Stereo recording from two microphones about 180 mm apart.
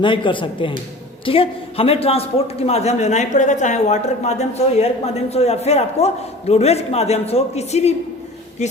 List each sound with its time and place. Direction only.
0.0 s a man's voice: 30° left (ahead or behind)